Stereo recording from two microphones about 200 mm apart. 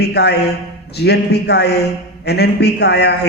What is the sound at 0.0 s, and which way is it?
A man's voice, 55° left (ahead or behind).